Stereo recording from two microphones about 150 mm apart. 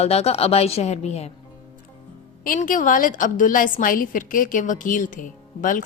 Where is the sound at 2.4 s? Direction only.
65° left (ahead or behind).